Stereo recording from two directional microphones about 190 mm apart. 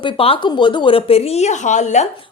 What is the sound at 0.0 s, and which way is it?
A woman's voice, 25° left (ahead or behind).